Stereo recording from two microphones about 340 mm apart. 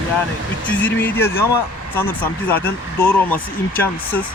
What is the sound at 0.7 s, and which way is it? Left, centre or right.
Speech, centre.